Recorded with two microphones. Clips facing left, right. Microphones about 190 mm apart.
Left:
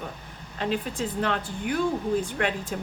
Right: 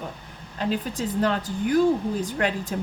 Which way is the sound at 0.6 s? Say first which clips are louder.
Right 2 dB; 40° right (ahead or behind).